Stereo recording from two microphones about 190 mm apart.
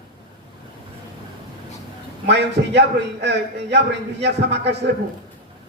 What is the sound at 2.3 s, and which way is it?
A man's voice, 65° right (ahead or behind).